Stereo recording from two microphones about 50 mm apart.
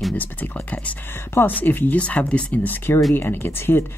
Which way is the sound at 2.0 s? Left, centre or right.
Left.